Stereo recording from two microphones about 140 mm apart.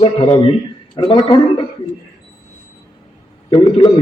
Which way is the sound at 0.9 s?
35° left (ahead or behind).